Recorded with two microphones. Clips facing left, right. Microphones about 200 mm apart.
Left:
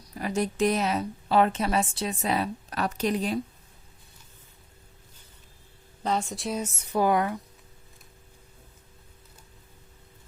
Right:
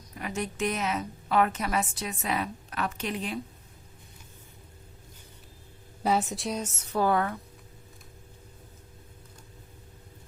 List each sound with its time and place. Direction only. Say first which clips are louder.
0.2 s a woman's voice: left 6 dB; 35° left (ahead or behind)
6.0 s a woman's voice: right 2 dB; 5° right (ahead or behind); by 7.3 s 15° left (ahead or behind)